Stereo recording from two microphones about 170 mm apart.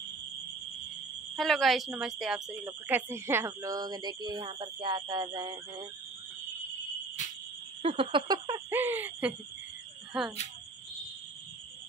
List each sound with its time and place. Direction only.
1.3 s speech: centre (ahead or behind)
2.6 s speech: 15° right (ahead or behind)
7.2 s fire alarm: 45° left (ahead or behind)
7.8 s a sound: 35° right (ahead or behind)
8.6 s speech: 10° right (ahead or behind)